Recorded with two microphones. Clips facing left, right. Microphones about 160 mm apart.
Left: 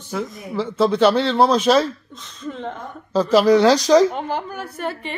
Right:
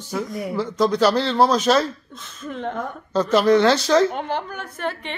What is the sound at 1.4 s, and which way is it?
Speech, 30° left (ahead or behind).